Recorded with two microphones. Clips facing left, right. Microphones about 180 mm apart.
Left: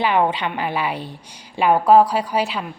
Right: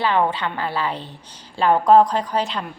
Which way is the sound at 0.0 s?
15° left (ahead or behind).